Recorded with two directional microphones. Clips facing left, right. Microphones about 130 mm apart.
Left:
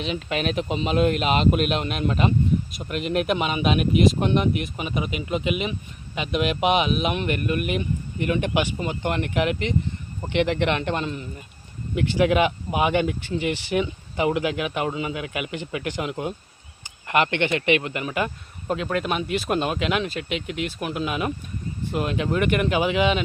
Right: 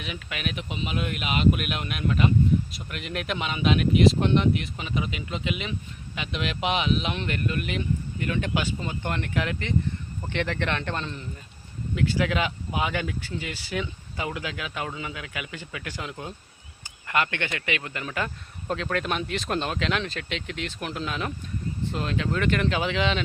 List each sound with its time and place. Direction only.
0.0 s speech: 30° left (ahead or behind); by 23.2 s 10° left (ahead or behind)